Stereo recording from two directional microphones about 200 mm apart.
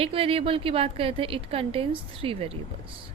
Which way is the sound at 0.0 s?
30° right (ahead or behind).